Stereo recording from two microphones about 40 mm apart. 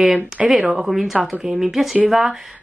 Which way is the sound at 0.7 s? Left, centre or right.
Centre.